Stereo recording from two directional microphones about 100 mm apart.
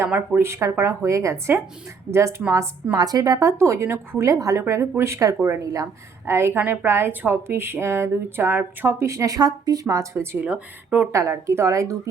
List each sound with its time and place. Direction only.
0.1 s a woman's voice: 20° right (ahead or behind)
2.9 s a woman's voice: 40° right (ahead or behind)
10.4 s speech: 10° right (ahead or behind)
11.1 s a woman's voice: 30° right (ahead or behind)